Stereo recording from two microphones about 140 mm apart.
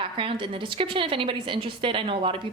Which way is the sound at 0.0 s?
35° right (ahead or behind).